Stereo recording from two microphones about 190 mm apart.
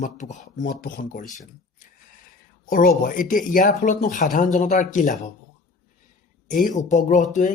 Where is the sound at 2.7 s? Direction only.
45° left (ahead or behind).